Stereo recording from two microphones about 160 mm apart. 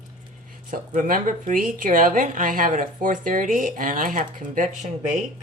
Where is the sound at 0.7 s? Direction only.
60° right (ahead or behind).